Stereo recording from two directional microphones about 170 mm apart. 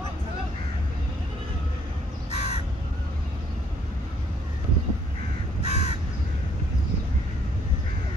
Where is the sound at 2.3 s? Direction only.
40° left (ahead or behind).